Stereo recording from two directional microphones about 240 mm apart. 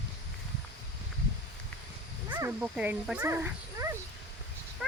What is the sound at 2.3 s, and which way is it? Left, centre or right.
Speech, centre.